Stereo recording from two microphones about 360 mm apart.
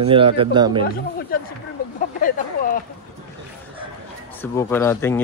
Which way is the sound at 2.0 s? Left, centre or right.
Left.